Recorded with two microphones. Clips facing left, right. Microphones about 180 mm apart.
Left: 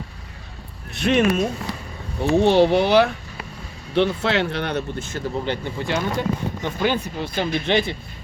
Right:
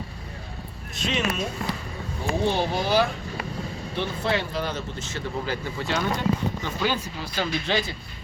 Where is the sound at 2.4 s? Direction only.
75° left (ahead or behind); by 5.2 s 55° left (ahead or behind).